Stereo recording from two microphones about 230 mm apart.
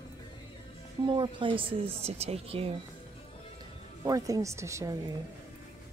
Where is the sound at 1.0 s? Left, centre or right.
Right.